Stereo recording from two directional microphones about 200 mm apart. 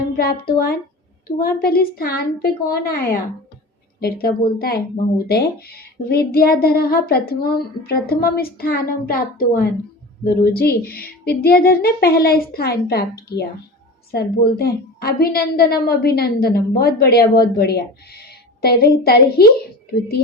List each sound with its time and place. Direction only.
1.4 s speech: 50° left (ahead or behind)
14.6 s speech: 50° left (ahead or behind)